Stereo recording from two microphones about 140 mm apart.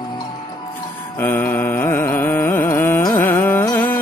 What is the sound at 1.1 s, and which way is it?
Carnatic music, 15° left (ahead or behind).